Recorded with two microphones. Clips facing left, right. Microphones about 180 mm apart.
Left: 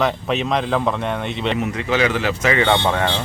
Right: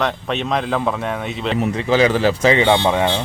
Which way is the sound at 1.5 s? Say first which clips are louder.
Right 6 dB; 35° right (ahead or behind).